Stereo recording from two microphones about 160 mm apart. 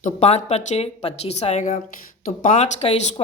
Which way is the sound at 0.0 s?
45° left (ahead or behind).